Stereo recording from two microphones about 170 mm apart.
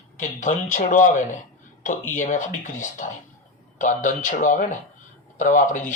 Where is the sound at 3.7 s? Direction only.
45° left (ahead or behind).